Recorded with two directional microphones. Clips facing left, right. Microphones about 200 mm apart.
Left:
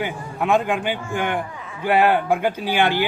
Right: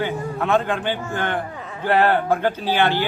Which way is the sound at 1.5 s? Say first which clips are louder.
Right 3 dB; 40° right (ahead or behind).